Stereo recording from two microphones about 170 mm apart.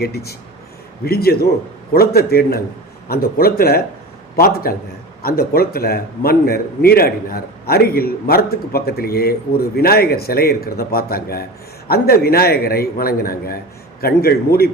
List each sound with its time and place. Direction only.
0.0 s a man's voice: 70° left (ahead or behind)